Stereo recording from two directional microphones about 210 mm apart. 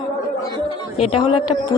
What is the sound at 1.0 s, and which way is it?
Speech, 25° left (ahead or behind).